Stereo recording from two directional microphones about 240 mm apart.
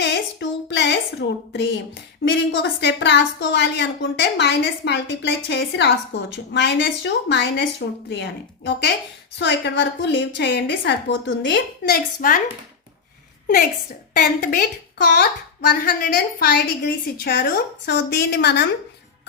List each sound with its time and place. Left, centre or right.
0.0 s a sound: left
2.5 s a woman's voice: left
14.1 s a woman's voice: left